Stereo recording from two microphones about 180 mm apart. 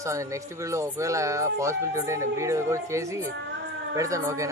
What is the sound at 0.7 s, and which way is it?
Speech, 15° right (ahead or behind).